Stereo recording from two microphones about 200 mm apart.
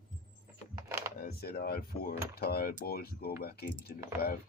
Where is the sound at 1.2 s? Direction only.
50° left (ahead or behind).